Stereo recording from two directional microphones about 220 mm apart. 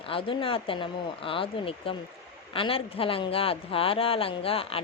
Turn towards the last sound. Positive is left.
turn(degrees=25)  # may be behind; listen again after turning